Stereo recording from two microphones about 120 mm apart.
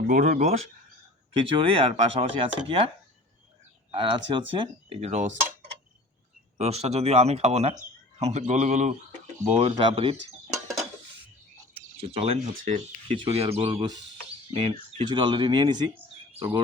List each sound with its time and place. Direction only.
0.1 s speech: 80° right
1.5 s speech: 45° right (ahead or behind)
3.9 s speech: 45° right (ahead or behind); by 5.5 s 75° right (ahead or behind)
6.6 s a man's voice: 65° right (ahead or behind); by 8.9 s 85° right
9.4 s a man's voice: 75° right (ahead or behind)
9.7 s speech: 50° right (ahead or behind)
11.9 s speech: 55° right (ahead or behind); by 15.9 s 40° right (ahead or behind)